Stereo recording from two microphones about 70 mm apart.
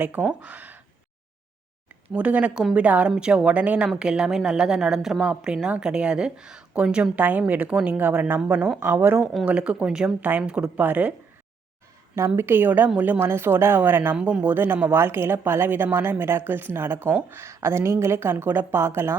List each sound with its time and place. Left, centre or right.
0.0 s speech: right
2.1 s a woman's voice: centre
9.4 s a woman's voice: centre
10.8 s speech: right
12.1 s speech: right
14.2 s a woman's voice: centre
14.4 s speech: right